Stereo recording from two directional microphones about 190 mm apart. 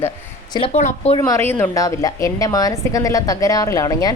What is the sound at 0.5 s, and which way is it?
Speech, 30° left (ahead or behind).